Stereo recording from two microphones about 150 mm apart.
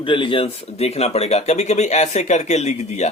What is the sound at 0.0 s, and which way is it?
Speech, 35° left (ahead or behind).